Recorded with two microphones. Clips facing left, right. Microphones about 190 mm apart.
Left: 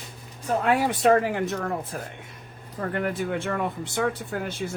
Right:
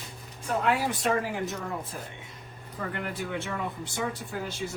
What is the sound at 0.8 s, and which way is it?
Speech, 60° left (ahead or behind).